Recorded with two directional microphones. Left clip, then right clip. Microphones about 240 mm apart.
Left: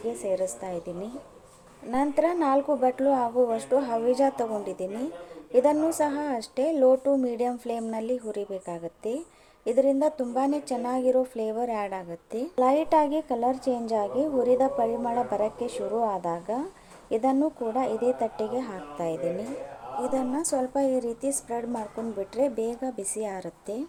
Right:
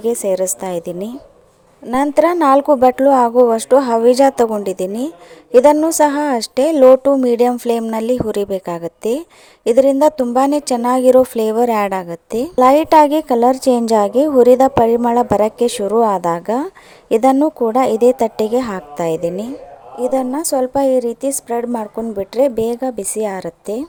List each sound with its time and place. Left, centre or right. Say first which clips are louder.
0.0 s speech: right 12 dB; right